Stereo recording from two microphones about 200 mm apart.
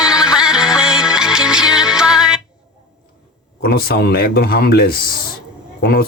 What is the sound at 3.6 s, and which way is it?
Speech, 50° left (ahead or behind).